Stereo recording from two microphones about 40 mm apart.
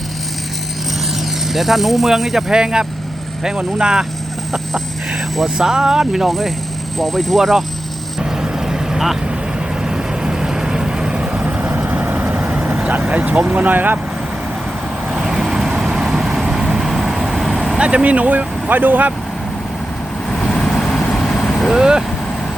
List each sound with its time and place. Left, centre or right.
1.5 s speech: centre
2.5 s speech: centre
5.5 s speech: centre
7.0 s speech: centre
8.2 s vehicle: centre
11.6 s vehicle: right
13.0 s speech: right
15.1 s vehicle: centre
17.7 s speech: right
20.3 s vehicle: centre
21.7 s speech: centre